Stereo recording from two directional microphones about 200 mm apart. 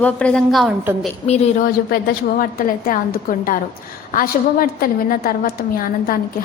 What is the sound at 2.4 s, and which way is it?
A woman's voice, 45° left (ahead or behind).